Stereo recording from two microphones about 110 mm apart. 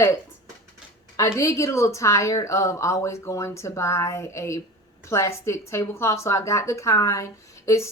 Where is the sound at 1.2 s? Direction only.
30° left (ahead or behind).